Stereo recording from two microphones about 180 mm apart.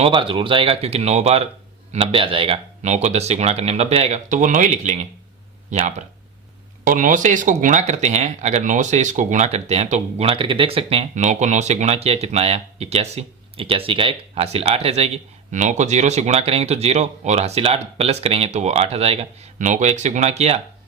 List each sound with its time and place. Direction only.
0.0 s speech: 25° right (ahead or behind)
6.8 s speech: 50° right (ahead or behind)